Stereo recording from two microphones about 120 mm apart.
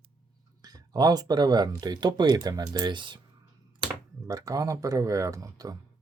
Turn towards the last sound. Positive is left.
turn(degrees=-30)  # may be behind; listen again after turning